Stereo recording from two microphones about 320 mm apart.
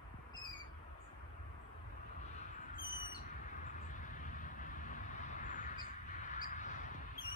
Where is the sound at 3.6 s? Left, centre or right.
Left.